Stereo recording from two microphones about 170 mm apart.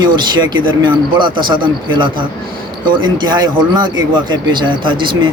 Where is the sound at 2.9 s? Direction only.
25° right (ahead or behind).